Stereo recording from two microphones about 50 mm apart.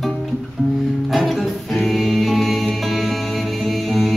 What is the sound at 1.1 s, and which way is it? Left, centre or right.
Music, centre.